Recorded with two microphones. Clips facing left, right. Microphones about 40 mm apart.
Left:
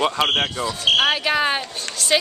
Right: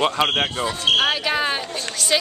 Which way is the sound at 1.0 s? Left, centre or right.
Centre.